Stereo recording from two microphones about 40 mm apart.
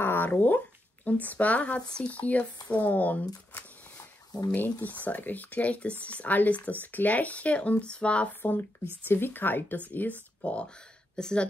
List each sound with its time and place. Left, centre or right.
0.0 s a sound: left
0.3 s speech: left
1.8 s speech: left
2.1 s speech: left
4.6 s speech: left
8.4 s speech: left
11.1 s speech: centre